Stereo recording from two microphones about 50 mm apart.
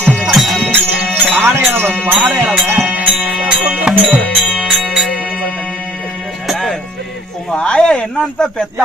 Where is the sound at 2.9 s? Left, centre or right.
Right.